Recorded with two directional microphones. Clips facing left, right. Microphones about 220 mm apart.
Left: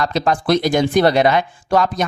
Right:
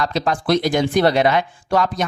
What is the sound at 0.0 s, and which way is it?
Speech, 50° left (ahead or behind).